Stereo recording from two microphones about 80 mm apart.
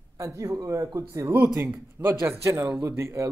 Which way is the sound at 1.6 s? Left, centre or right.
Right.